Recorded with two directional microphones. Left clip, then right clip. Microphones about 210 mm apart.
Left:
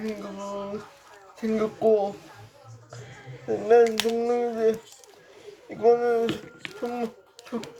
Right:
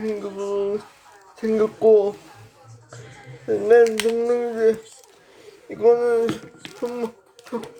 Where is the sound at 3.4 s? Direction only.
20° right (ahead or behind).